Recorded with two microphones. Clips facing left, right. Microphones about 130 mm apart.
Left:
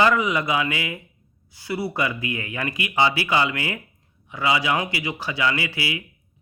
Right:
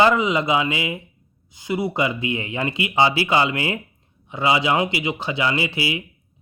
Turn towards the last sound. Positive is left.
turn(degrees=-25)  # may be behind; listen again after turning